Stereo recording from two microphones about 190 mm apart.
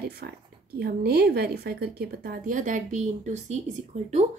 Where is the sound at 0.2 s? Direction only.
60° right (ahead or behind).